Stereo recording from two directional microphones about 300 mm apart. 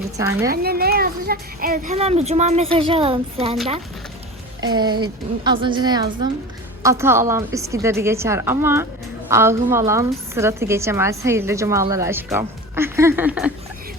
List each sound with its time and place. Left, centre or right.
0.4 s a child's voice: right
4.6 s a woman's voice: centre